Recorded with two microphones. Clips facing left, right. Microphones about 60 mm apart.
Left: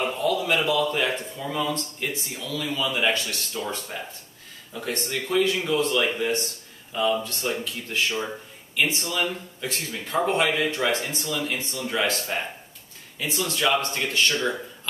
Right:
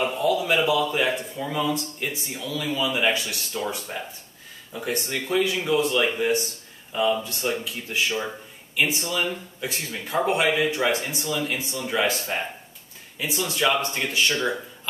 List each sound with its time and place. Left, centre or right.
0.0 s speech: centre